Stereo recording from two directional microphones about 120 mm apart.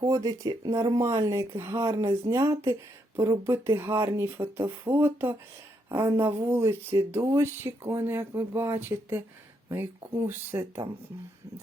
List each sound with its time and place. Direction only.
0.0 s speech: 30° right (ahead or behind)
10.2 s speech: 20° right (ahead or behind)